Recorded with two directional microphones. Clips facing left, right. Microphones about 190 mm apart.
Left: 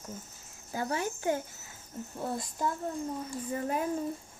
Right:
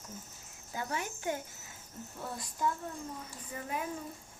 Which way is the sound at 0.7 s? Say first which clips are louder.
Left 5 dB; 35° left (ahead or behind).